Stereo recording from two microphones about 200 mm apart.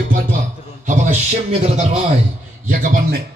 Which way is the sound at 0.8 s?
35° right (ahead or behind).